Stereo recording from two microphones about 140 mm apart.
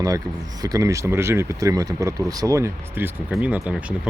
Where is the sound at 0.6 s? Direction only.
25° right (ahead or behind).